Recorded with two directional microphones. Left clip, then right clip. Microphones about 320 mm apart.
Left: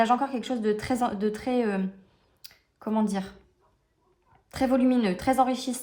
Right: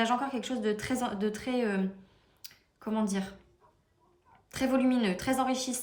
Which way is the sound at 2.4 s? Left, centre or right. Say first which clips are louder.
Left 5 dB; centre.